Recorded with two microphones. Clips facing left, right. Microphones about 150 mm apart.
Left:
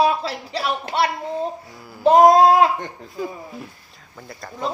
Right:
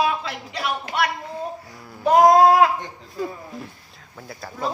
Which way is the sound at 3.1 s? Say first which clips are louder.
Right 1 dB; centre (ahead or behind).